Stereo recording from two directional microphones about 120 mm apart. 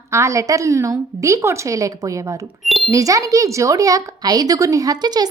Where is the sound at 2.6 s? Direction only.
Centre (ahead or behind).